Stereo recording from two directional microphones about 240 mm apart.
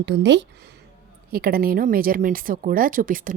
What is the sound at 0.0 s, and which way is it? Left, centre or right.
A woman's voice, right.